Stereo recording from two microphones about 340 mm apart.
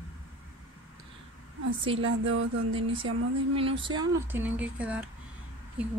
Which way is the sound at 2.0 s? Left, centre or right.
Right.